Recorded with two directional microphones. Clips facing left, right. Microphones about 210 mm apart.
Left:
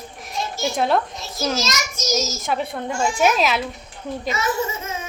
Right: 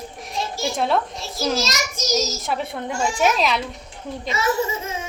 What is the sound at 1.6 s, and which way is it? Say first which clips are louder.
Speech: even; 35° right (ahead or behind).